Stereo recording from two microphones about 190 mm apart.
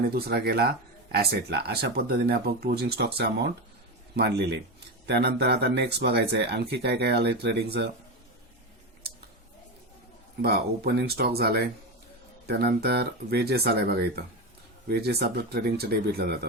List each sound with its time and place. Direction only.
0.1 s speech: 55° right (ahead or behind)
10.4 s speech: 60° right (ahead or behind)